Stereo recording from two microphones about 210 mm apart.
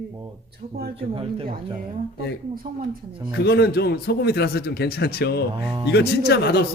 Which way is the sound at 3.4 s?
50° left (ahead or behind).